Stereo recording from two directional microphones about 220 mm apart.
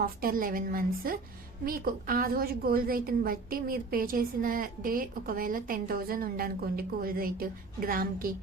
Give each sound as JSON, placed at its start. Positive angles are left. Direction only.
{"t": 0.0, "sound": "a woman's voice", "side_deg": -40}